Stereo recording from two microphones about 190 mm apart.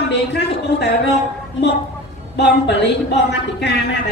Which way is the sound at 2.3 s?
65° left (ahead or behind).